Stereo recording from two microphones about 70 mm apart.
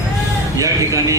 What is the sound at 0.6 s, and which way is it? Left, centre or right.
Speech, right.